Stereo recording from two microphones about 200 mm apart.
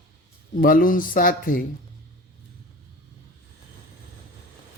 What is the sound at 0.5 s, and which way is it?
Speech, 45° left (ahead or behind).